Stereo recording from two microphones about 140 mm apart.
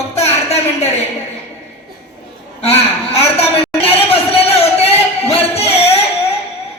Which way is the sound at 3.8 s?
45° left (ahead or behind).